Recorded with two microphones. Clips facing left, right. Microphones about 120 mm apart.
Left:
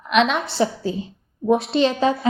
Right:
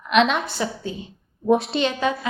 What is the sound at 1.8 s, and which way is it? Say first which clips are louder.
Speech: left 4 dB; 30° left (ahead or behind).